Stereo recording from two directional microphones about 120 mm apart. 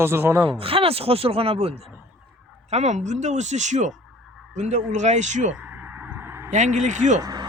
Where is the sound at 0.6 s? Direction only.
50° right (ahead or behind).